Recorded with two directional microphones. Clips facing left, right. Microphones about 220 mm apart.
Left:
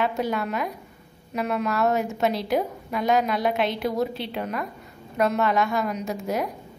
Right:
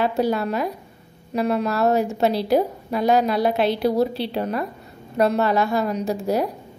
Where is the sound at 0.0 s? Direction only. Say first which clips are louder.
Right 4 dB; 35° right (ahead or behind).